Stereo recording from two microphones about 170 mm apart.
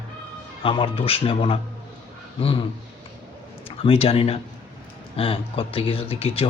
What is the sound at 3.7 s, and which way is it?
A man's voice, 35° left (ahead or behind).